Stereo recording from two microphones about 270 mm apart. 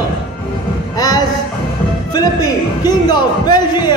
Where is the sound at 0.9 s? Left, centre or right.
Centre.